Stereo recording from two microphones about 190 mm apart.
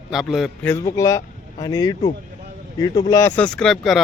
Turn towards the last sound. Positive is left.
turn(degrees=0)  # may be behind; listen again after turning